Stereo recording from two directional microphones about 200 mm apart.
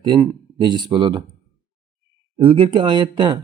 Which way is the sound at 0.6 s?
20° right (ahead or behind).